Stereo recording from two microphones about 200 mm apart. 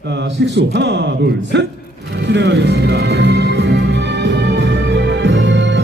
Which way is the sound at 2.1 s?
60° right (ahead or behind).